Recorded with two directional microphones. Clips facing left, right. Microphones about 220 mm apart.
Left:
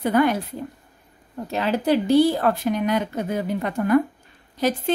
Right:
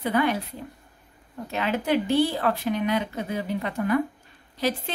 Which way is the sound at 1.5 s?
35° left (ahead or behind).